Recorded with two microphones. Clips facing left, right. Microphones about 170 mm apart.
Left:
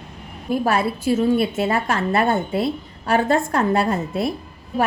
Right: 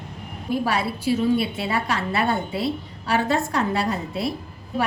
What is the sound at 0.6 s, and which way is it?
A woman's voice, 50° left (ahead or behind).